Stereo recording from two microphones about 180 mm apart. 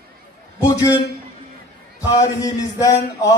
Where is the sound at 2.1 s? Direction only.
20° left (ahead or behind).